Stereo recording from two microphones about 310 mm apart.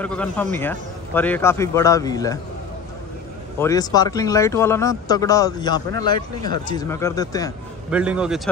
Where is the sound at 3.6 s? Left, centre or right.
Centre.